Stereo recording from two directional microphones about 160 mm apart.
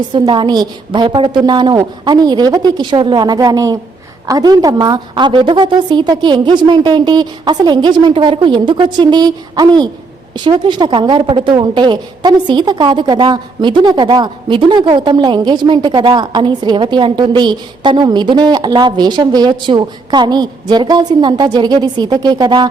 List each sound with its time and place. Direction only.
0.1 s a woman's voice: 30° right (ahead or behind)